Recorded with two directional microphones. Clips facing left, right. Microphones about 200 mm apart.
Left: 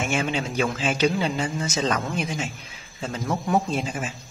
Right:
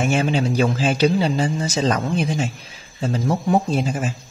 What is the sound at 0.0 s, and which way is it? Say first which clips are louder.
A man's voice: right 6 dB; 35° right (ahead or behind).